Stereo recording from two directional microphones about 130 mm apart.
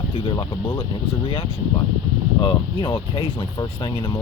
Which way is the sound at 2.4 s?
40° left (ahead or behind).